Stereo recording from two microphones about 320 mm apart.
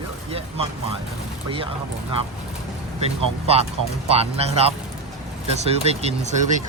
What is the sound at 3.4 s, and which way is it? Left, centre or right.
Speech, centre.